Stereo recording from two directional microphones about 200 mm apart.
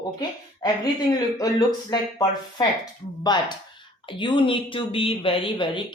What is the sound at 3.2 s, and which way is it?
Speech, 20° left (ahead or behind).